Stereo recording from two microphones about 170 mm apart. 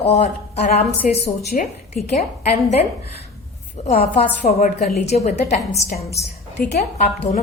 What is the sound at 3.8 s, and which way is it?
A woman's voice, 35° left (ahead or behind).